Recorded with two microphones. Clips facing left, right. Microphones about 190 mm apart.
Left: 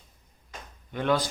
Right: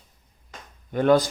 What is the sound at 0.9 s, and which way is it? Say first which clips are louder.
Speech: right 7 dB; 45° right (ahead or behind).